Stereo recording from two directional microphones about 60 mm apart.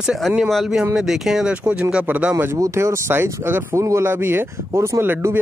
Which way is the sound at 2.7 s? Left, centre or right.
Right.